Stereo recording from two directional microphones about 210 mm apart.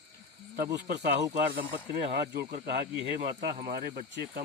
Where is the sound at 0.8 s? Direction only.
50° right (ahead or behind).